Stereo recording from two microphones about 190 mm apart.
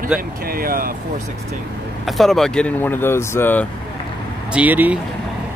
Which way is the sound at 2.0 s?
Centre (ahead or behind).